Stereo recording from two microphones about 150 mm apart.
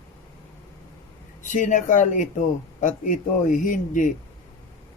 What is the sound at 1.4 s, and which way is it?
Speech, 55° left (ahead or behind).